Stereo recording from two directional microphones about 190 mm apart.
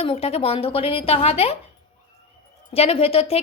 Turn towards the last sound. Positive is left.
turn(degrees=30)  # may be behind; listen again after turning